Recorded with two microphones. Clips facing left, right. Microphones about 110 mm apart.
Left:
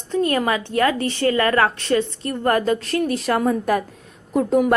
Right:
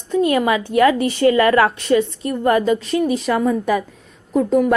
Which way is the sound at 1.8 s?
5° right (ahead or behind).